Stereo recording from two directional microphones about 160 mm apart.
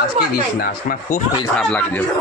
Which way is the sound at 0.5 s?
65° left (ahead or behind).